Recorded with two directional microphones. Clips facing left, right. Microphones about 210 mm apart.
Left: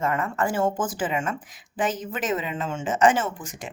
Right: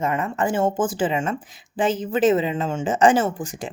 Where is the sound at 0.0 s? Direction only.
20° right (ahead or behind).